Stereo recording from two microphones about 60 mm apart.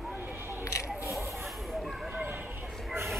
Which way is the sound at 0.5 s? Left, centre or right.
Left.